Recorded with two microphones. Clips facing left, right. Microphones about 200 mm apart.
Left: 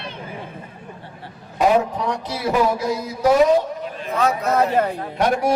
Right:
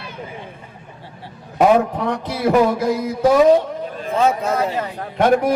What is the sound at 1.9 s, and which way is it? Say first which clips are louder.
A man's voice: right 2 dB; 55° right (ahead or behind).